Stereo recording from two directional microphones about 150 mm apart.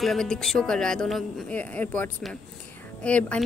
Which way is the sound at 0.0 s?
Centre (ahead or behind).